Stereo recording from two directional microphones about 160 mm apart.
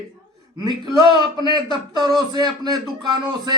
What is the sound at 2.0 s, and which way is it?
Speech, 25° right (ahead or behind).